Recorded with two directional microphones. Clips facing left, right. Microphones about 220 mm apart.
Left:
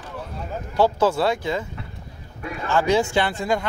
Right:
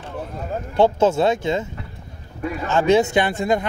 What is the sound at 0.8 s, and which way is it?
A man's voice, 25° right (ahead or behind).